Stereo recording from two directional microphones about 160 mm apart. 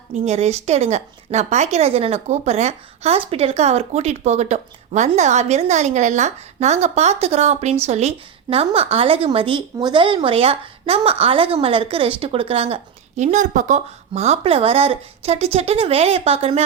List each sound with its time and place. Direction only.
0.1 s a woman's voice: 45° right (ahead or behind)